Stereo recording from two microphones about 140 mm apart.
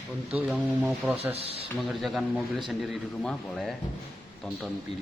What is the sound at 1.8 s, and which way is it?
A man's voice, centre (ahead or behind).